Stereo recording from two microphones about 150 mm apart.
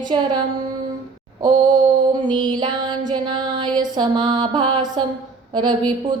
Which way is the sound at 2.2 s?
30° right (ahead or behind).